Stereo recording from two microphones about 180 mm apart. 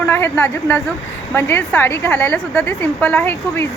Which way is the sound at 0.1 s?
10° left (ahead or behind).